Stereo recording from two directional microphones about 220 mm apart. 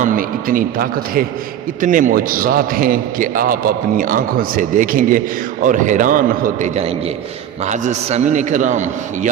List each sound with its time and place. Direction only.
0.0 s a man's voice: 40° right (ahead or behind)